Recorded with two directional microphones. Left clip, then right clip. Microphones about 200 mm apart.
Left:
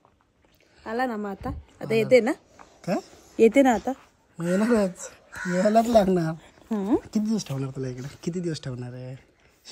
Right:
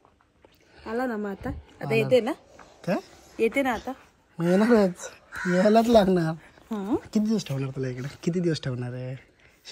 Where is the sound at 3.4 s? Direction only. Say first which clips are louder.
Left 6 dB; 50° left (ahead or behind).